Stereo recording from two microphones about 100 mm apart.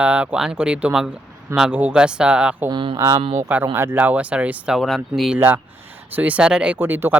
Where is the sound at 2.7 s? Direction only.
55° right (ahead or behind).